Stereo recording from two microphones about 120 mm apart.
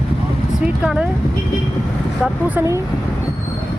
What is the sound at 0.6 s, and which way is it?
Speech, 10° right (ahead or behind).